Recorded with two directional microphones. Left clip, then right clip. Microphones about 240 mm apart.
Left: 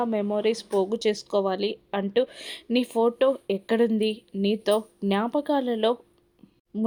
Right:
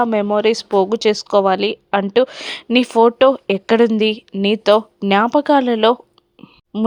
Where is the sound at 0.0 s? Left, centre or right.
Centre.